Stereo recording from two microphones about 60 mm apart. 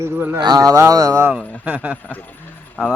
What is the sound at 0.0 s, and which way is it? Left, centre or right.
Speech, right.